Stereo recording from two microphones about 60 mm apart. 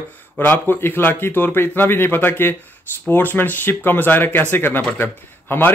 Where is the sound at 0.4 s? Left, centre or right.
Left.